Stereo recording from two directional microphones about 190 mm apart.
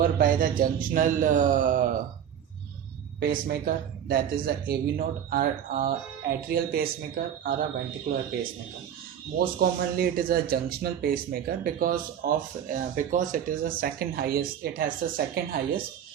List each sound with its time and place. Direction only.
0.0 s speech: 45° right (ahead or behind)
3.2 s speech: 50° right (ahead or behind)
9.4 s speech: 50° right (ahead or behind)